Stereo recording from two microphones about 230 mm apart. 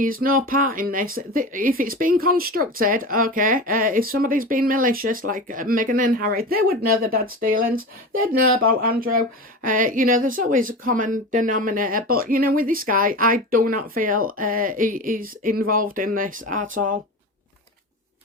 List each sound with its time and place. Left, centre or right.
0.0 s speech: right